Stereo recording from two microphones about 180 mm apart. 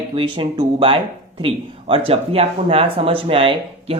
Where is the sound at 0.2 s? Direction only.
25° right (ahead or behind).